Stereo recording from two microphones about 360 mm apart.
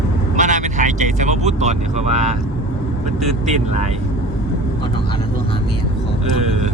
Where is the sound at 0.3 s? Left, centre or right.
Right.